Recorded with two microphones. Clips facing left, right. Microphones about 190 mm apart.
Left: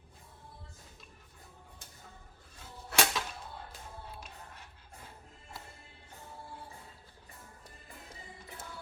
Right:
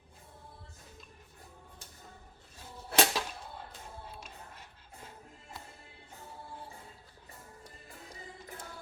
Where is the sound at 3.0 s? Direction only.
35° right (ahead or behind).